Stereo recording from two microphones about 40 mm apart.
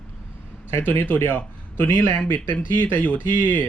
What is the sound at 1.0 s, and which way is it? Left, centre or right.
Speech, left.